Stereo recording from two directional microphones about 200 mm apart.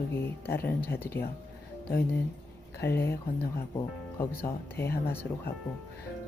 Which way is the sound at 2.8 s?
10° left (ahead or behind).